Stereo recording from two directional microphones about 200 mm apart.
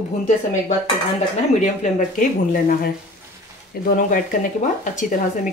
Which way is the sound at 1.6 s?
40° left (ahead or behind).